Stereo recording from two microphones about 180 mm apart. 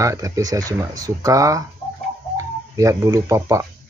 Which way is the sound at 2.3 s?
20° right (ahead or behind).